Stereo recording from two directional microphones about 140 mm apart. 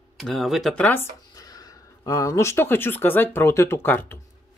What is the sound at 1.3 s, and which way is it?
Speech, 25° left (ahead or behind).